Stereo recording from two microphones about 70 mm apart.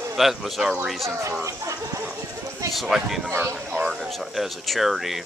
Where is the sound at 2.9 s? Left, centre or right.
Centre.